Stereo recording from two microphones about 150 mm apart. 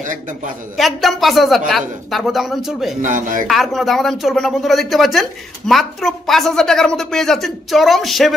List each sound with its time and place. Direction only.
0.0 s speech: 55° right (ahead or behind)
0.7 s speech: centre (ahead or behind)
3.0 s speech: 60° right (ahead or behind)
3.4 s speech: centre (ahead or behind)